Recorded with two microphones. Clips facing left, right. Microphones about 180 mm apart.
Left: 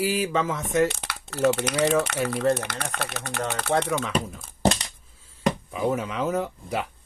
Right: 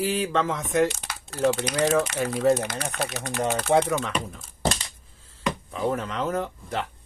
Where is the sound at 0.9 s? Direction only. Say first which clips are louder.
Left 2 dB; 65° left (ahead or behind).